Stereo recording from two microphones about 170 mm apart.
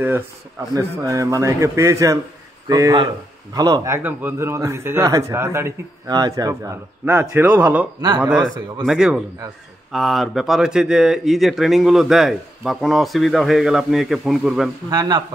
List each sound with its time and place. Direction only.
0.7 s a man's voice: 20° right (ahead or behind)
14.9 s speech: 25° right (ahead or behind)